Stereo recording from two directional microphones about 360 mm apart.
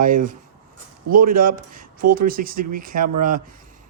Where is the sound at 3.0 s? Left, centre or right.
Right.